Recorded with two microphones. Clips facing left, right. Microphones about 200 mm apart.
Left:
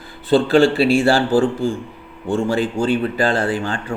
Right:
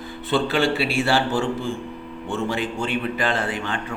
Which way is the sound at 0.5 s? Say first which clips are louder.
Left 8 dB; 40° left (ahead or behind).